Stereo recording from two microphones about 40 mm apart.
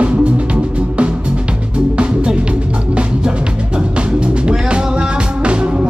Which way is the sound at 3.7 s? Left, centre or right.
Right.